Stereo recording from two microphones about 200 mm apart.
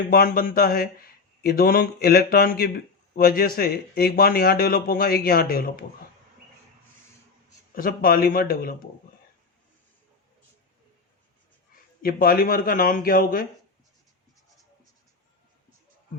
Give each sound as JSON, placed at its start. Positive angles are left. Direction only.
{"t": 0.1, "sound": "speech", "side_deg": 45}
{"t": 7.8, "sound": "speech", "side_deg": 45}
{"t": 12.0, "sound": "speech", "side_deg": 45}